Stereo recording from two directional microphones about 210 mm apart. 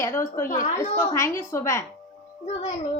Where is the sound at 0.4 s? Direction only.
40° left (ahead or behind).